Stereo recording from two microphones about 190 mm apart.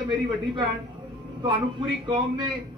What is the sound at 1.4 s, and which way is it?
Speech, 25° right (ahead or behind).